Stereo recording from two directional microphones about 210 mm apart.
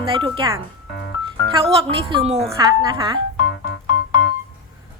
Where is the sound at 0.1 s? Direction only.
20° right (ahead or behind).